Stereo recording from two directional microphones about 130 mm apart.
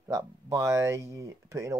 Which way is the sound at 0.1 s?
25° right (ahead or behind).